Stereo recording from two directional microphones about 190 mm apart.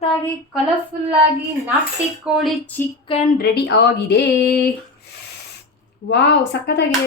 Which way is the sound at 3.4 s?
60° left (ahead or behind).